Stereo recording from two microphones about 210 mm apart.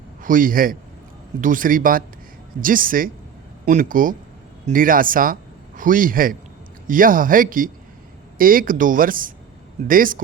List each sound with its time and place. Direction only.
0.2 s a man's voice: 40° right (ahead or behind)